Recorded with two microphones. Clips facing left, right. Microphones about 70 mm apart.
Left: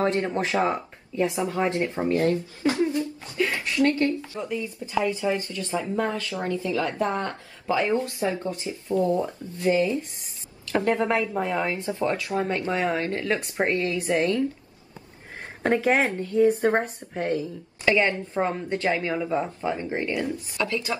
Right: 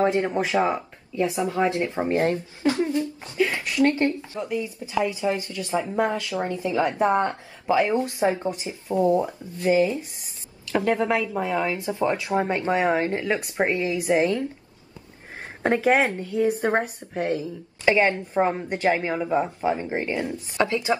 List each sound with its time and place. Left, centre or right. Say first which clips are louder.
0.0 s a woman's voice: right 2 dB; centre
1.9 s a woman's voice: even; right
3.3 s a woman's voice: right 2 dB; centre
4.5 s a woman's voice: right 3 dB; centre
11.3 s a woman's voice: right 1 dB; centre
11.8 s a woman's voice: right 2 dB; right
15.6 s a woman's voice: right 2 dB; centre; by 21.0 s right